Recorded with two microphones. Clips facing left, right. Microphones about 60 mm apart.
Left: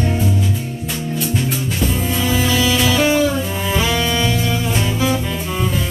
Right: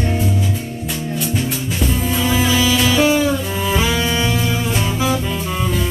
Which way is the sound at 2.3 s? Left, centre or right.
Centre.